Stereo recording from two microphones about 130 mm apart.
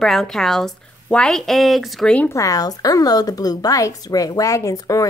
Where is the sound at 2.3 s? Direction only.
25° left (ahead or behind).